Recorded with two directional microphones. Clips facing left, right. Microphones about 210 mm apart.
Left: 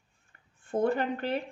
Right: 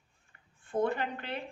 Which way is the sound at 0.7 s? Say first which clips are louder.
Left 3 dB; 45° left (ahead or behind).